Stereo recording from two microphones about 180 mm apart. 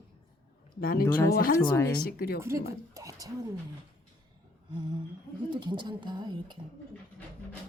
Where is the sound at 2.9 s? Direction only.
20° right (ahead or behind).